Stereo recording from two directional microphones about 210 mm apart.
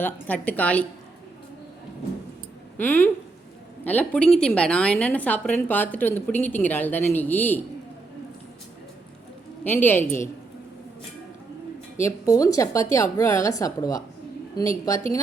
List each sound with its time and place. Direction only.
0.0 s a woman's voice: 10° left (ahead or behind)
2.7 s a woman's voice: 10° left (ahead or behind)
9.6 s a woman's voice: 10° left (ahead or behind)
11.9 s a woman's voice: 15° left (ahead or behind)